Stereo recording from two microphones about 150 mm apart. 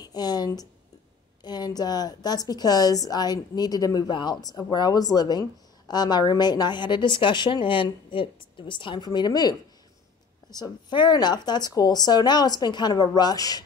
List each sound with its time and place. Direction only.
0.0 s a woman's voice: 25° left (ahead or behind)